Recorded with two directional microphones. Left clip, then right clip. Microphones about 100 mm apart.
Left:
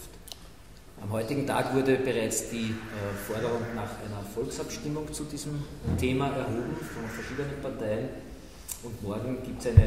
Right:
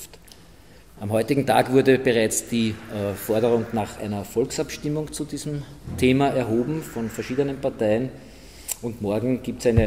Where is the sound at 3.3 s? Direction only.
Centre (ahead or behind).